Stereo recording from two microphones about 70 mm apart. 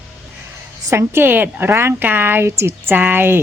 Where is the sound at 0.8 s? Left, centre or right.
Right.